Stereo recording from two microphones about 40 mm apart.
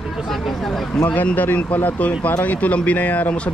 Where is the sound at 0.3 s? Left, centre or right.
Centre.